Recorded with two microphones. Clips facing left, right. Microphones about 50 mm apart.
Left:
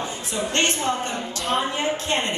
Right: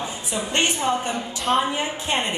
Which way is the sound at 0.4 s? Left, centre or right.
Centre.